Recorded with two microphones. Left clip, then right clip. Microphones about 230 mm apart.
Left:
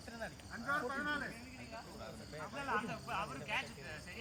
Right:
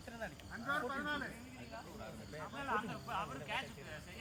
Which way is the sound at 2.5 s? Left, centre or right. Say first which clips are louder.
Left 1 dB; left.